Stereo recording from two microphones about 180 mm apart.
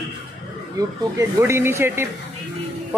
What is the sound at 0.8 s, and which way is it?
A man's voice, 20° right (ahead or behind).